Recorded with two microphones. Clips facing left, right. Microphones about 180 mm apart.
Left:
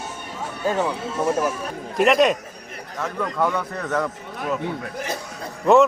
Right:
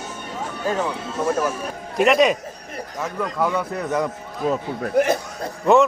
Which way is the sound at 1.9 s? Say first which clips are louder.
Right 1 dB; centre (ahead or behind).